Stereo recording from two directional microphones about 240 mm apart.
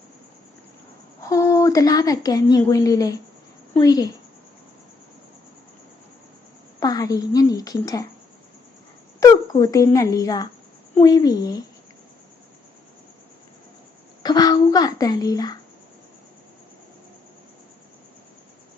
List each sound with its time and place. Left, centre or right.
1.2 s a woman's voice: centre
6.7 s a woman's voice: centre
9.2 s a woman's voice: centre
14.2 s a woman's voice: centre